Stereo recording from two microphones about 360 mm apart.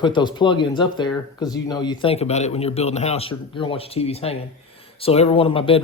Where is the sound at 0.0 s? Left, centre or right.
Centre.